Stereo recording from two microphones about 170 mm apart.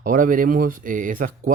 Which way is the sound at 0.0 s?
50° right (ahead or behind).